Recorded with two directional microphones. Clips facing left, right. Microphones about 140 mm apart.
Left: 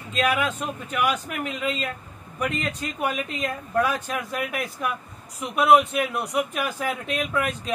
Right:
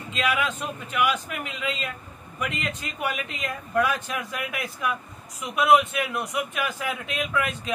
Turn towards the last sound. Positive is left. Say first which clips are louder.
# left 1 dB
turn(degrees=40)  # may be behind; listen again after turning